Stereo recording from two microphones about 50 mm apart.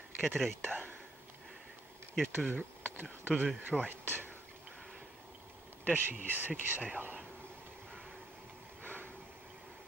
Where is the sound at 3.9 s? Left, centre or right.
Right.